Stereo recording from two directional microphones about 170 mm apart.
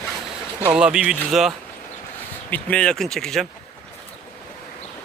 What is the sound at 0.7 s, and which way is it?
Speech, 5° right (ahead or behind).